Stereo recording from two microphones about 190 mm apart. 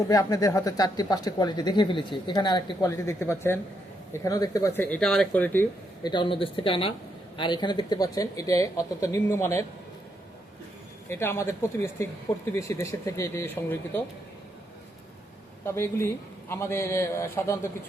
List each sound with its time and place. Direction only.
0.1 s speech: 20° left (ahead or behind)
6.0 s speech: 25° left (ahead or behind)
11.1 s speech: 10° left (ahead or behind)
15.6 s speech: 15° left (ahead or behind)